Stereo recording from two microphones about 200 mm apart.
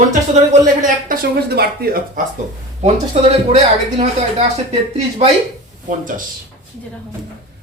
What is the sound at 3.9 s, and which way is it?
A woman's voice, 30° right (ahead or behind).